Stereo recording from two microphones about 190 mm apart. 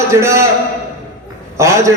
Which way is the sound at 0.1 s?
15° right (ahead or behind).